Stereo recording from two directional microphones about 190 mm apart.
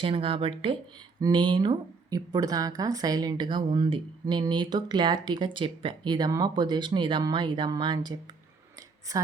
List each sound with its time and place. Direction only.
0.0 s a woman's voice: 30° right (ahead or behind)